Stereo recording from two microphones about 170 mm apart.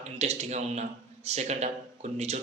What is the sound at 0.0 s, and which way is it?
A man's voice, 40° right (ahead or behind).